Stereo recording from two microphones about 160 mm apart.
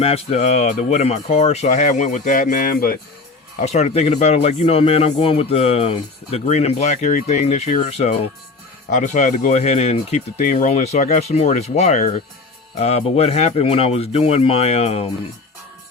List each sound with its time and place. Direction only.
0.0 s speech: 40° left (ahead or behind); by 2.9 s 60° left (ahead or behind)
3.6 s speech: 45° left (ahead or behind)